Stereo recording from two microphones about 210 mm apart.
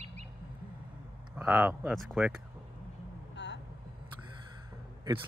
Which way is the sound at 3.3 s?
55° left (ahead or behind).